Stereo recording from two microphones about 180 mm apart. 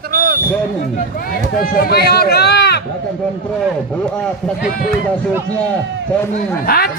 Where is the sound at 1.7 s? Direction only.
60° left (ahead or behind).